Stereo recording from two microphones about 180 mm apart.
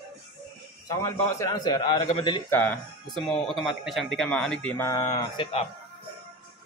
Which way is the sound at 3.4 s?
Centre (ahead or behind).